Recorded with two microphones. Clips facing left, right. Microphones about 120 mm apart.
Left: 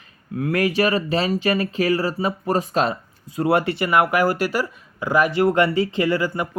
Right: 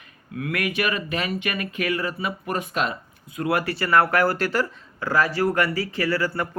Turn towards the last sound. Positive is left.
turn(degrees=15)  # may be behind; listen again after turning